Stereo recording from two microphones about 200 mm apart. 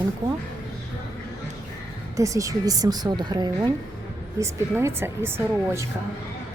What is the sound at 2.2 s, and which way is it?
Speech, 15° right (ahead or behind).